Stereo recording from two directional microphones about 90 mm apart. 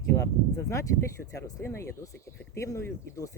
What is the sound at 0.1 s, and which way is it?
Speech, 35° left (ahead or behind).